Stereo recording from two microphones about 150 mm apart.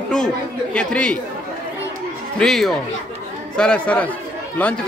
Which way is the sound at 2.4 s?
Centre (ahead or behind).